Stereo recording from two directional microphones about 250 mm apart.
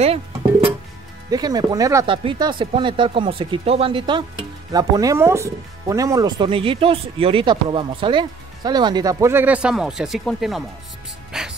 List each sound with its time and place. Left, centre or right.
0.0 s music: right
1.3 s speech: centre
11.3 s music: centre